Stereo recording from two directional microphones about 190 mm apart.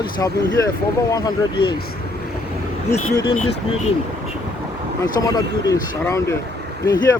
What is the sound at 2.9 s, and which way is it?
Speech, 20° left (ahead or behind).